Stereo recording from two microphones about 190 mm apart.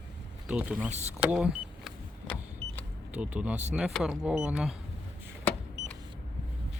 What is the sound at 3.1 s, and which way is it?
Speech, 5° right (ahead or behind).